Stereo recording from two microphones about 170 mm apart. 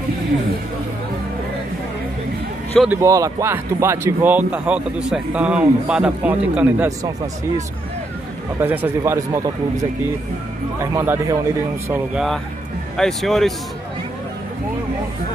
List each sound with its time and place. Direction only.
2.8 s speech: 10° right (ahead or behind)
8.5 s speech: 10° right (ahead or behind)
11.9 s speech: 5° right (ahead or behind)